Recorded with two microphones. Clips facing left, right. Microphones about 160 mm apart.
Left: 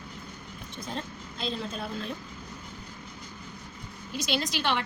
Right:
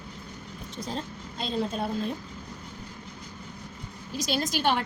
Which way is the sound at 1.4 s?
45° right (ahead or behind).